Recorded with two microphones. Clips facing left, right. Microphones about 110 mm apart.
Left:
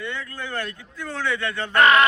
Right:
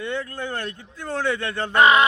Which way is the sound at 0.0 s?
40° right (ahead or behind).